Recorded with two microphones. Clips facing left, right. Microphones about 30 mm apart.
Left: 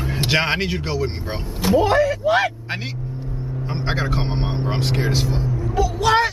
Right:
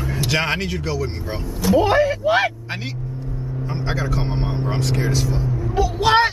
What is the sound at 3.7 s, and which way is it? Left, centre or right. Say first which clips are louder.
Speech: left 1 dB; left.